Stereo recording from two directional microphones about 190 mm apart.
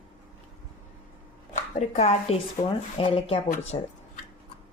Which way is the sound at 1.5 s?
35° left (ahead or behind).